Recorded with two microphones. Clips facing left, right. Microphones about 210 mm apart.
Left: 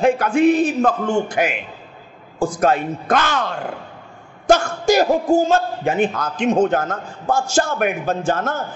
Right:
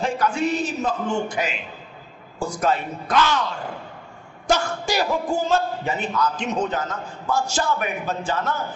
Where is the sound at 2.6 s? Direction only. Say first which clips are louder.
Left 4 dB; 50° left (ahead or behind).